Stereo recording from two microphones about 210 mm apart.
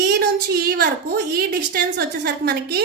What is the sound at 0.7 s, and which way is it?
A woman's voice, 45° right (ahead or behind).